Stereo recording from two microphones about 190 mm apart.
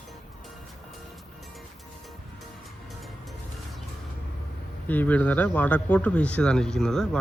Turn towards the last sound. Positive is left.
turn(degrees=5)  # may be behind; listen again after turning